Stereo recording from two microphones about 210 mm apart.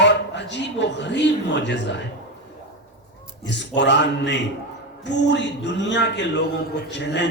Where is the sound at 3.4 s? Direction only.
55° left (ahead or behind).